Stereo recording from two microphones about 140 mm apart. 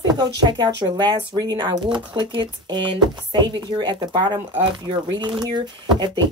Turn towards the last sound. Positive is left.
turn(degrees=-30)  # may be behind; listen again after turning